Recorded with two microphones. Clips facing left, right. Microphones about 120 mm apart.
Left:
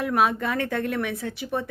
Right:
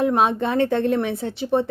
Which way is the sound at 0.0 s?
25° right (ahead or behind).